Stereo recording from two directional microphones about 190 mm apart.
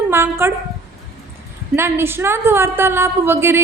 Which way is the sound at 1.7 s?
10° right (ahead or behind).